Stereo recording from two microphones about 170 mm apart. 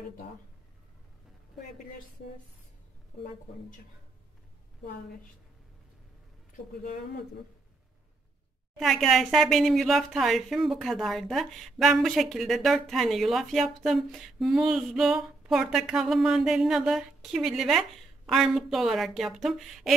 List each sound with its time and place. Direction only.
6.5 s speech: 55° left (ahead or behind)
8.7 s speech: centre (ahead or behind)